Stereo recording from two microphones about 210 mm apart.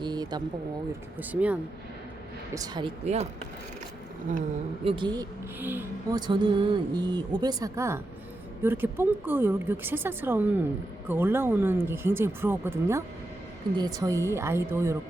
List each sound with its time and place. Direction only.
0.0 s speech: 20° right (ahead or behind)
1.3 s speech: 5° right (ahead or behind)
2.6 s speech: 20° right (ahead or behind)
4.9 s speech: 20° right (ahead or behind)
5.5 s speech: 10° right (ahead or behind)